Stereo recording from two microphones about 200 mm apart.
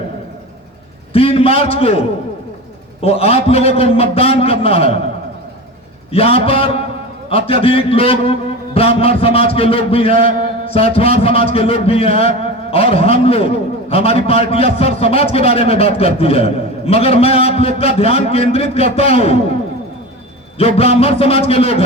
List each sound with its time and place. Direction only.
1.1 s a man's voice: 30° left (ahead or behind)
3.0 s a man's voice: 30° left (ahead or behind)
6.1 s a man's voice: 30° left (ahead or behind)
20.6 s a man's voice: 30° left (ahead or behind)